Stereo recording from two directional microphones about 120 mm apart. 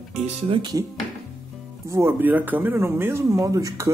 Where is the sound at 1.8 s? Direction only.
25° right (ahead or behind).